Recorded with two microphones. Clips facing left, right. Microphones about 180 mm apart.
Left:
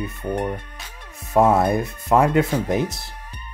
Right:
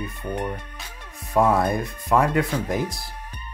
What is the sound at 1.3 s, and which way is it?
Speech, 25° left (ahead or behind).